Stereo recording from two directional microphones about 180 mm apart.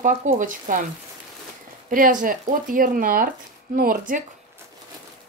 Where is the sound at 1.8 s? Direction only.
50° right (ahead or behind).